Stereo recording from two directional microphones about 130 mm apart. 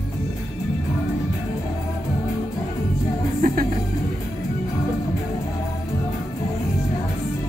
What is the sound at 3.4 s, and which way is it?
Music, 90° right.